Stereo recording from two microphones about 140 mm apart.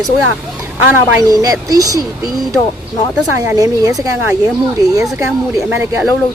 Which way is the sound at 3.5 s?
25° right (ahead or behind).